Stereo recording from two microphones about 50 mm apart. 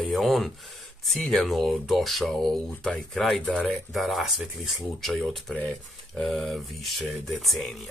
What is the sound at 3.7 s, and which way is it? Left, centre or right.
Speech, centre.